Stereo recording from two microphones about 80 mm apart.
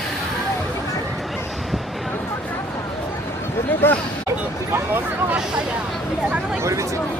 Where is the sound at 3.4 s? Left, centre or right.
Left.